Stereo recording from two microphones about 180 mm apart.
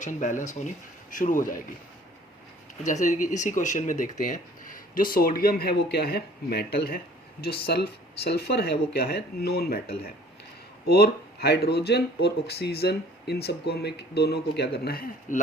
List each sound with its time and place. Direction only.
0.0 s speech: 45° left (ahead or behind)
2.8 s speech: 45° left (ahead or behind); by 9.8 s 60° left (ahead or behind)
10.9 s speech: 60° left (ahead or behind)